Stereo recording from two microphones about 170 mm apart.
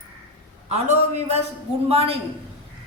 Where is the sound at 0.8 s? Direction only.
40° right (ahead or behind).